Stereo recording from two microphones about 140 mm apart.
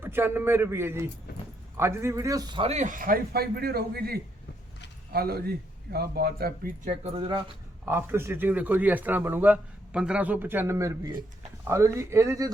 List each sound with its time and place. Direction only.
0.0 s a man's voice: 15° right (ahead or behind)
2.6 s a man's voice: 50° right (ahead or behind); by 6.9 s 90° right
7.9 s a man's voice: 15° right (ahead or behind)